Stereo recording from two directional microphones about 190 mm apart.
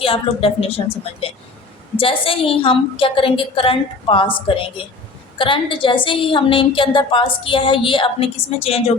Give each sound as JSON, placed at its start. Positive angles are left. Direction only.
{"t": 0.0, "sound": "a woman's voice", "side_deg": 30}